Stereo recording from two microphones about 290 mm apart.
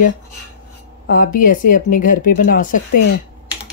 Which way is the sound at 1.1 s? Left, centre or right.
Left.